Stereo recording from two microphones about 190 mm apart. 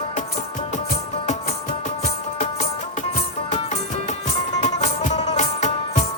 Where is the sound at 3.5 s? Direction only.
40° left (ahead or behind).